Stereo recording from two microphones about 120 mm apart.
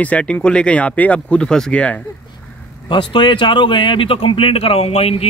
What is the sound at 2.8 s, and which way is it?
Speech, 45° left (ahead or behind).